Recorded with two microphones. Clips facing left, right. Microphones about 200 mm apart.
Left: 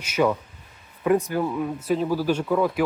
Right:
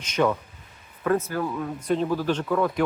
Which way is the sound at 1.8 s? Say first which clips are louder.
Right 1 dB; 5° left (ahead or behind).